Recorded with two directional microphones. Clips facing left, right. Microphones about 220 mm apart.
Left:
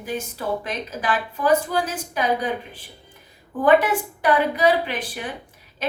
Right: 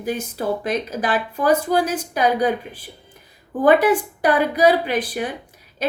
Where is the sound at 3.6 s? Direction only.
40° right (ahead or behind).